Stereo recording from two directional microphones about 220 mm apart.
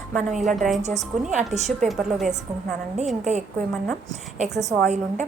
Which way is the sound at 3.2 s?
30° right (ahead or behind).